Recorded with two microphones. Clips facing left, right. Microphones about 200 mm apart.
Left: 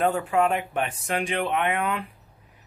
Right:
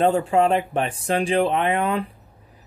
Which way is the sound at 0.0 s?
30° right (ahead or behind).